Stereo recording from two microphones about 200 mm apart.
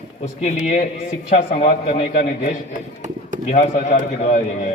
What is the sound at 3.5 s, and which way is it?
A man's voice, 35° left (ahead or behind).